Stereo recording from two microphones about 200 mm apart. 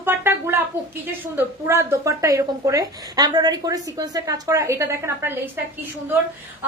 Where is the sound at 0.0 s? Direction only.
10° right (ahead or behind).